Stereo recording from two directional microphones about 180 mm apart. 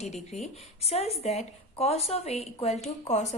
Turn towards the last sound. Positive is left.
turn(degrees=35)  # may be behind; listen again after turning